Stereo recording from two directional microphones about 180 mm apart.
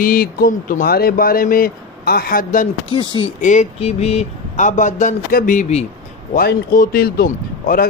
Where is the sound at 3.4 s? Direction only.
40° left (ahead or behind).